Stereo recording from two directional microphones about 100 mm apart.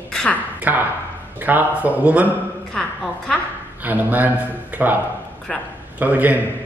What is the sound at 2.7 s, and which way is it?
Speech, 10° left (ahead or behind).